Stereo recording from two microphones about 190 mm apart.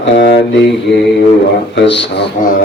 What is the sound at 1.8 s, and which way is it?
Music, 65° left (ahead or behind).